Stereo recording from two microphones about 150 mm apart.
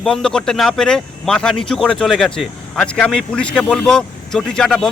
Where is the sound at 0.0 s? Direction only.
5° left (ahead or behind).